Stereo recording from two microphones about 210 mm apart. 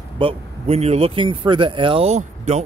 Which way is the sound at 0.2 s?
30° right (ahead or behind).